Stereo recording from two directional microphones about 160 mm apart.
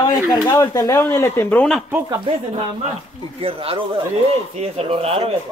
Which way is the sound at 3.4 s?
35° right (ahead or behind).